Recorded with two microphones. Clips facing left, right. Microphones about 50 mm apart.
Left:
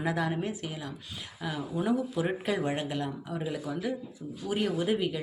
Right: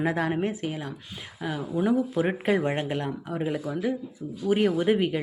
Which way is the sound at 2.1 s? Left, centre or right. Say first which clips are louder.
Right 5 dB; right.